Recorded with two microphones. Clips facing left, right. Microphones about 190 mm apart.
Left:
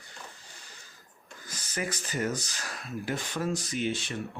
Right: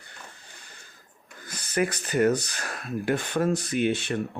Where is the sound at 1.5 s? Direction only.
60° right (ahead or behind).